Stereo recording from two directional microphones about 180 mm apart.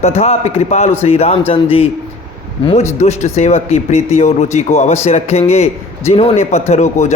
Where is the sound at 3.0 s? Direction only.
40° left (ahead or behind).